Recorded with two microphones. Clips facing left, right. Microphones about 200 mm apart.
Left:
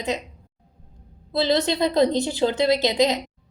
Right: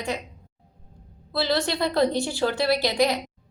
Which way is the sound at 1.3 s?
20° left (ahead or behind).